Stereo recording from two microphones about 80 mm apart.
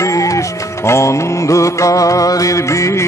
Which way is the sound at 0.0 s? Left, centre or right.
Left.